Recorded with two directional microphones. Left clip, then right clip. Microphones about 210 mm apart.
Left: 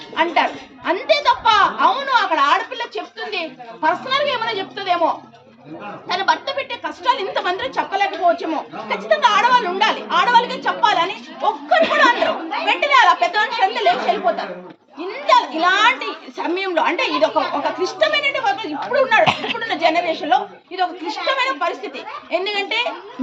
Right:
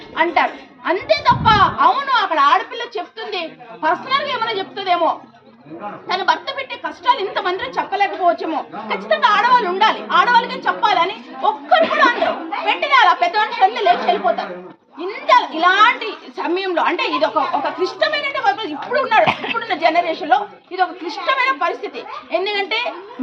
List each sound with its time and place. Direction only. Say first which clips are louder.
0.9 s a woman's voice: right 1 dB; 20° left (ahead or behind)
19.2 s speech: even; 35° left (ahead or behind)
19.5 s a woman's voice: right 2 dB; 20° left (ahead or behind)